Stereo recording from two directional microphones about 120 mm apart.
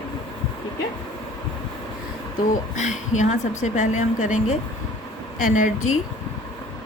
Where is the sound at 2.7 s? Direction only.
85° left.